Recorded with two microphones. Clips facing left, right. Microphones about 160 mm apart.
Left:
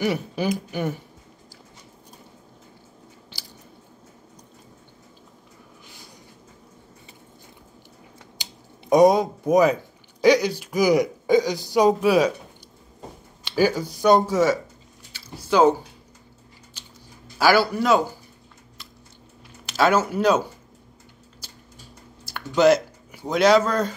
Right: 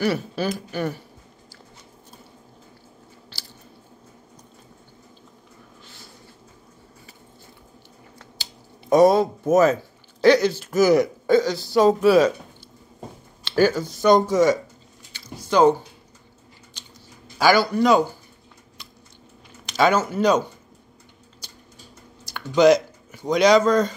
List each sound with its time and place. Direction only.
0.0 s speech: 20° left (ahead or behind)
8.4 s finger snapping: 15° left (ahead or behind)
9.5 s speech: 15° left (ahead or behind)
13.4 s speech: 10° left (ahead or behind)
15.1 s a sound: 5° left (ahead or behind)
16.8 s chewing: 5° left (ahead or behind)
17.4 s a man's voice: 5° left (ahead or behind)
19.6 s speech: 5° left (ahead or behind)
21.4 s a sound: 5° left (ahead or behind)
22.2 s speech: 5° left (ahead or behind)